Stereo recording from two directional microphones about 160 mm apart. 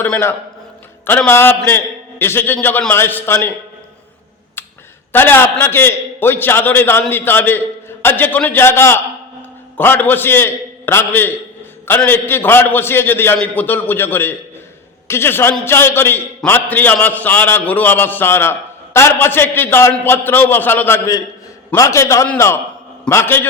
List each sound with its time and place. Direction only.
0.0 s a man's voice: 10° left (ahead or behind)
5.1 s a man's voice: 15° left (ahead or behind)